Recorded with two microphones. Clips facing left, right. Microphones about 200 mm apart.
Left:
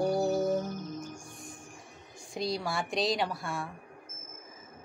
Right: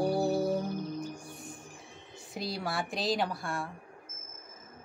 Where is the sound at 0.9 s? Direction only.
60° right (ahead or behind).